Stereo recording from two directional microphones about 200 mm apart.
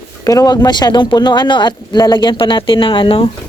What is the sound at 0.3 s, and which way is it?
Speech, 20° left (ahead or behind).